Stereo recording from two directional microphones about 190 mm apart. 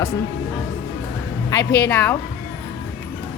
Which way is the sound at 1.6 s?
60° left (ahead or behind).